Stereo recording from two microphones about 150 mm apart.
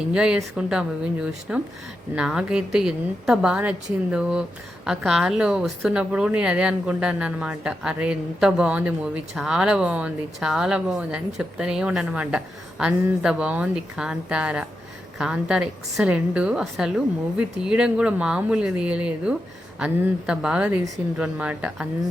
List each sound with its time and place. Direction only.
0.1 s a woman's voice: 5° right (ahead or behind)